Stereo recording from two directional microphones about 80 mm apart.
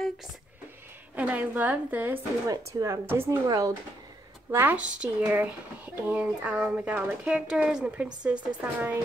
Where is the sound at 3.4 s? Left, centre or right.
Right.